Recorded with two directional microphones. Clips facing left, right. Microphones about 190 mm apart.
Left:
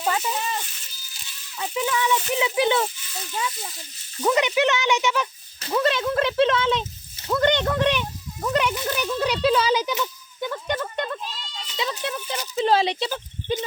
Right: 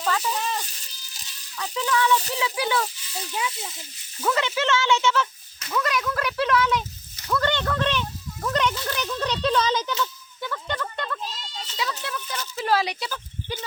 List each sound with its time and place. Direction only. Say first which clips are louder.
0.0 s rattle: left 1 dB; 20° left (ahead or behind)
0.3 s rattle: even; centre (ahead or behind)
0.6 s a sound: even; 35° right (ahead or behind)
1.5 s speech: even; 15° left (ahead or behind)
3.3 s speech: left 1 dB; 5° right (ahead or behind)
4.2 s speech: left 4 dB; 15° left (ahead or behind)
5.5 s speech: left 4 dB; 30° left (ahead or behind)